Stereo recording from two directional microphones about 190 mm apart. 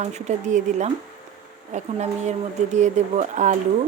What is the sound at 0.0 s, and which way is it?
Speech, 40° right (ahead or behind).